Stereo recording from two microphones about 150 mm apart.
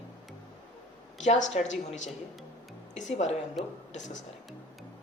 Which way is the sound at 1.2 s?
50° left (ahead or behind).